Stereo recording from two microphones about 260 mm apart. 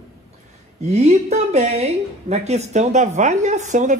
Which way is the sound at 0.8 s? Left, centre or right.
Right.